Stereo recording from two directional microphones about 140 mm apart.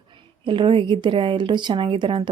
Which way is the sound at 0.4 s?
35° right (ahead or behind).